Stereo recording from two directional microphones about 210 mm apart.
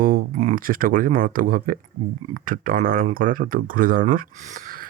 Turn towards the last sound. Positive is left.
turn(degrees=-40)  # may be behind; listen again after turning